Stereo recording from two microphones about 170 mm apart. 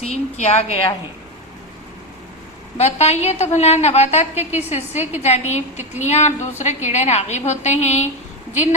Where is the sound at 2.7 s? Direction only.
40° left (ahead or behind).